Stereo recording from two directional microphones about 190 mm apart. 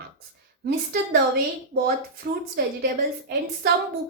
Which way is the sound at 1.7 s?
50° right (ahead or behind).